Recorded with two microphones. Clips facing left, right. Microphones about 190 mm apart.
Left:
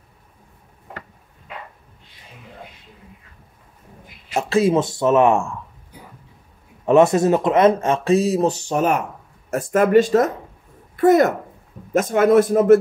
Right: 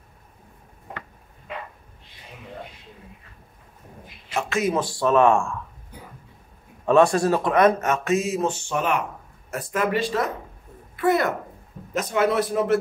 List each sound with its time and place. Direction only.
4.3 s speech: 35° left (ahead or behind); by 5.6 s 20° left (ahead or behind)
6.9 s speech: 20° left (ahead or behind); by 12.7 s 45° left (ahead or behind)